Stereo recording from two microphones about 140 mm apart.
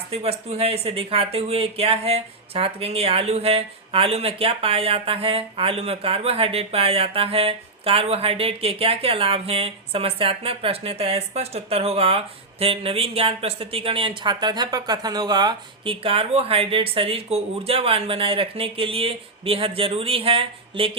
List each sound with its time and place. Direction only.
0.1 s speech: 45° right (ahead or behind)